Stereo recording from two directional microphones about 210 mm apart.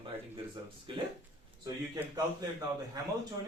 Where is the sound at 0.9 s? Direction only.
25° right (ahead or behind).